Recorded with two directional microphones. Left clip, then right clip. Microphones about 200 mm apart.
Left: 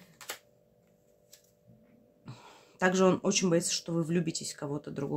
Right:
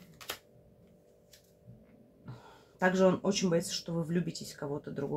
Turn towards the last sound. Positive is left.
turn(degrees=25)  # may be behind; listen again after turning